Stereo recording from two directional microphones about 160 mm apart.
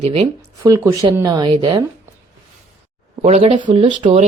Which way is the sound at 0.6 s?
20° right (ahead or behind).